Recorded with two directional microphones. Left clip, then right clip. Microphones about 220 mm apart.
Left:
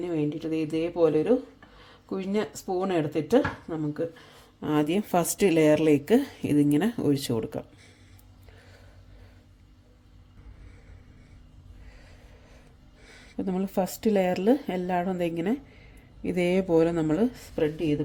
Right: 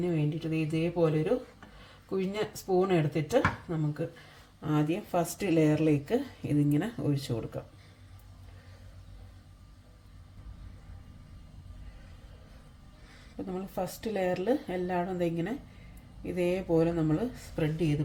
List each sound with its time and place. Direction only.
0.0 s a woman's voice: 45° left (ahead or behind)
13.3 s a woman's voice: 50° left (ahead or behind)